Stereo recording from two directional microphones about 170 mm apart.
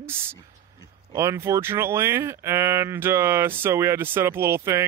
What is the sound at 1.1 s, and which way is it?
Speech, 15° right (ahead or behind).